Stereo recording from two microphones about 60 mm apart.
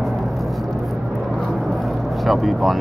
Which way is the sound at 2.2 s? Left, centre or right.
Centre.